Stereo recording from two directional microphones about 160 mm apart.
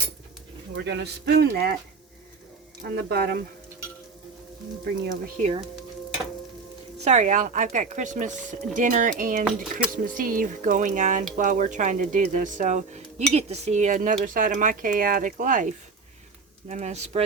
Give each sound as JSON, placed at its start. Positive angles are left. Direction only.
{"t": 0.7, "sound": "speech", "side_deg": -90}
{"t": 2.8, "sound": "speech", "side_deg": -85}
{"t": 7.0, "sound": "speech", "side_deg": -45}